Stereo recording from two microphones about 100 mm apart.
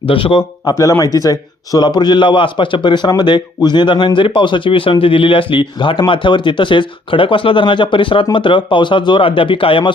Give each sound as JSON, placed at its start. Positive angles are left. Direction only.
{"t": 0.0, "sound": "speech", "side_deg": 65}
{"t": 0.6, "sound": "a man's voice", "side_deg": 35}